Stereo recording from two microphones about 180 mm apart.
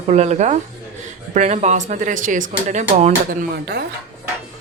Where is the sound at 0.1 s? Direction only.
40° right (ahead or behind).